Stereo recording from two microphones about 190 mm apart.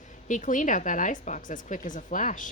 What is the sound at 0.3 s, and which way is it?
Speech, 40° left (ahead or behind).